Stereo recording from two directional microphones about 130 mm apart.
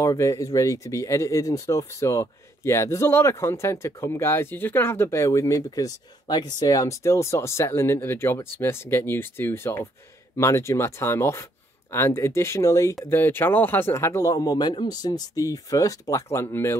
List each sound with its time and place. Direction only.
0.0 s speech: 25° left (ahead or behind)